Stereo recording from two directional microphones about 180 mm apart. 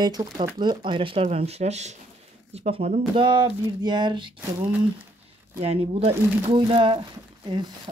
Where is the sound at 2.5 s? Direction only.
35° right (ahead or behind).